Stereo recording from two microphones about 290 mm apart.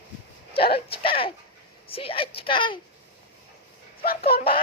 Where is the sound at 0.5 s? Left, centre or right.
Centre.